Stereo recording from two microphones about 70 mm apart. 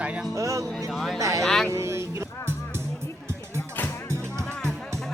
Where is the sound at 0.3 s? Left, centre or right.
Right.